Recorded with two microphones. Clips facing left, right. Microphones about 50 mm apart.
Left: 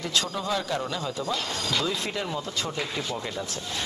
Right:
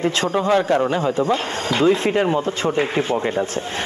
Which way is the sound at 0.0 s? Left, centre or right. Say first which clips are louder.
Right 9 dB; right.